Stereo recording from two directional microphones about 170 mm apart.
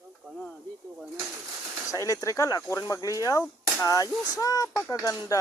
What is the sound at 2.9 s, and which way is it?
Hammer, 20° left (ahead or behind).